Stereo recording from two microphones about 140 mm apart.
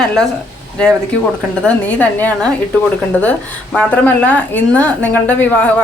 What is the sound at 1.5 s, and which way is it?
A woman's voice, 5° left (ahead or behind).